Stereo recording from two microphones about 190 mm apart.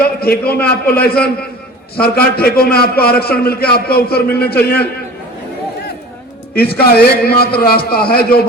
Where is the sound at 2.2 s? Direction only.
55° left (ahead or behind).